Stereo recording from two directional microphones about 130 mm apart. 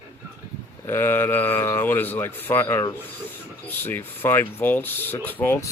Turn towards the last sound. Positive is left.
turn(degrees=15)  # may be behind; listen again after turning